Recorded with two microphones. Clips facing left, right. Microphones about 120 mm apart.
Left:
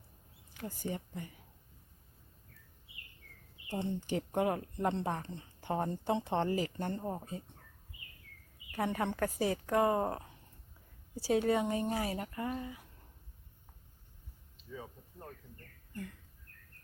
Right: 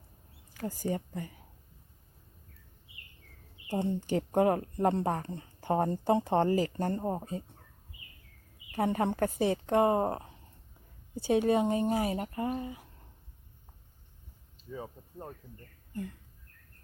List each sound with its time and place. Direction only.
0.5 s speech: 40° right (ahead or behind)
4.0 s speech: 35° right (ahead or behind)
8.7 s speech: 30° right (ahead or behind)
14.7 s speech: 35° right (ahead or behind)